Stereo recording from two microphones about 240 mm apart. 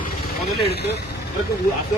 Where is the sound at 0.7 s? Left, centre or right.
Left.